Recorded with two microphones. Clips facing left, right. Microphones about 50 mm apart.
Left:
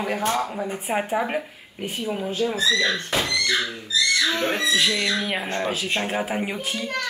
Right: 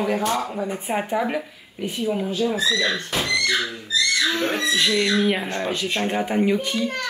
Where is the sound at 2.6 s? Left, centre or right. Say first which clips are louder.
Even; left.